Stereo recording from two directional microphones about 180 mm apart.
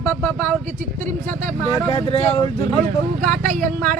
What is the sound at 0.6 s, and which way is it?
Speech, 40° right (ahead or behind).